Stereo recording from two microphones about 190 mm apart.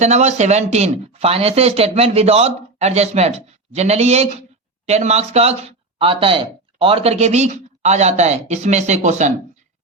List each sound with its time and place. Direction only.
0.0 s speech: 35° right (ahead or behind)